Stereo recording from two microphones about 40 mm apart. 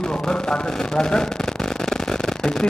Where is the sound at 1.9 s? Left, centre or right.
Centre.